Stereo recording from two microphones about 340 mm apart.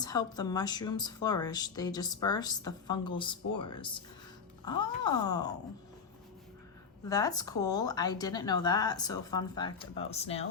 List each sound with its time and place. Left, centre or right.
0.0 s speech: centre
7.1 s speech: centre